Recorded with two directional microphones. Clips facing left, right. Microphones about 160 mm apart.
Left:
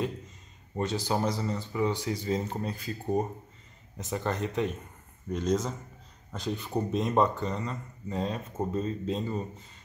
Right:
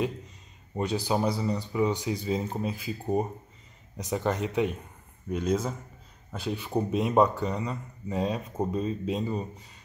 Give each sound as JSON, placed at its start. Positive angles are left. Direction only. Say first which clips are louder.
{"t": 0.7, "sound": "speech", "louder": "right 2 dB", "side_deg": -15}
{"t": 4.0, "sound": "speech", "louder": "right 3 dB", "side_deg": -15}